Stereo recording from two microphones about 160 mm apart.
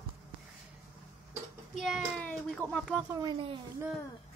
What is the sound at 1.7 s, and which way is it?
A child's voice, centre (ahead or behind).